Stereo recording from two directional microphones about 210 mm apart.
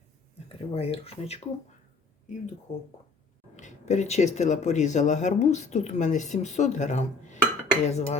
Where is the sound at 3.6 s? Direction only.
35° left (ahead or behind).